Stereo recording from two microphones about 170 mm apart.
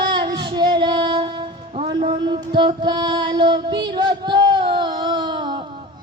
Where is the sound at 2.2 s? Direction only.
30° right (ahead or behind).